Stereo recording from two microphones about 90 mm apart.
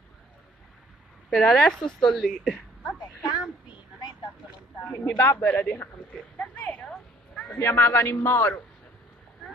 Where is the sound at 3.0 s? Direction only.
45° left (ahead or behind).